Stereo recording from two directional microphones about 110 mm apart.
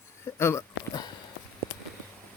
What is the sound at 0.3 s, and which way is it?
Speech, 25° left (ahead or behind).